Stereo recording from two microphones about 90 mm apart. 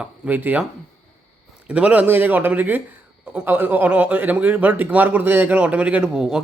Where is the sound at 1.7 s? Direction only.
15° right (ahead or behind).